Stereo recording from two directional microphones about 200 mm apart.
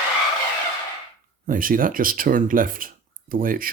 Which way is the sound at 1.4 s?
45° right (ahead or behind).